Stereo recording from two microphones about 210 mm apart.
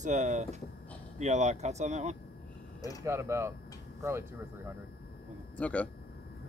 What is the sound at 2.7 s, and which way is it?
Speech, 15° left (ahead or behind).